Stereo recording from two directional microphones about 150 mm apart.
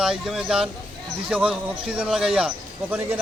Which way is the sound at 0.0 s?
5° right (ahead or behind).